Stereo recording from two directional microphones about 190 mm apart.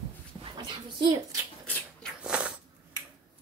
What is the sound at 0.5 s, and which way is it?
Speech, 25° right (ahead or behind).